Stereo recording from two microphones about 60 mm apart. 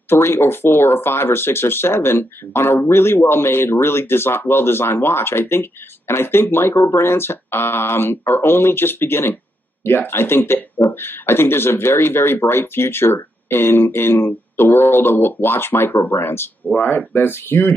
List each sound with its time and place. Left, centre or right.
0.1 s speech: left